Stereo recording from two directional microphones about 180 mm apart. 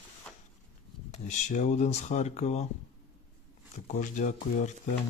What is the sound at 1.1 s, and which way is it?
Speech, 40° left (ahead or behind).